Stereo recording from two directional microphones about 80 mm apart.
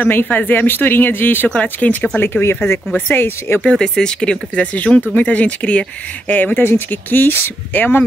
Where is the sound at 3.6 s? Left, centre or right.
Centre.